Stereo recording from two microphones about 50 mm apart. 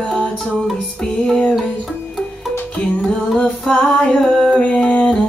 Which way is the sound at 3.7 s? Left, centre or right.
Centre.